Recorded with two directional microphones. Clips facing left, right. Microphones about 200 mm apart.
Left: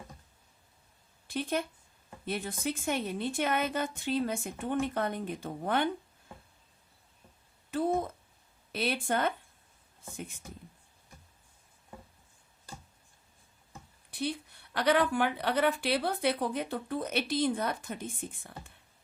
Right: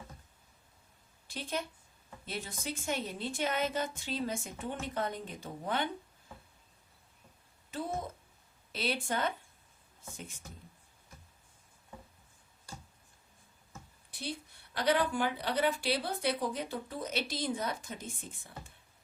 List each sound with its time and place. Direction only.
1.3 s a woman's voice: 55° left (ahead or behind)
7.7 s a woman's voice: 55° left (ahead or behind)
14.1 s a woman's voice: 60° left (ahead or behind)